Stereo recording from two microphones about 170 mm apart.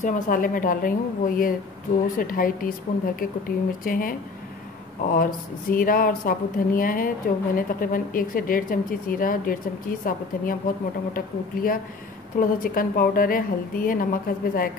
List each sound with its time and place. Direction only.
0.0 s a woman's voice: 55° left (ahead or behind)